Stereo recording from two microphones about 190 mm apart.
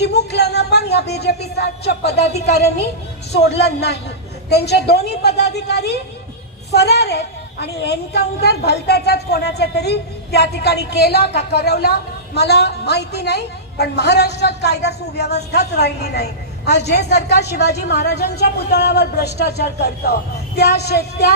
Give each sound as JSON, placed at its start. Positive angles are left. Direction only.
{"t": 0.0, "sound": "a woman's voice", "side_deg": 60}